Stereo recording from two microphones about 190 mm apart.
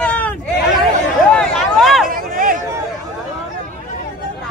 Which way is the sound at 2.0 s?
50° right (ahead or behind).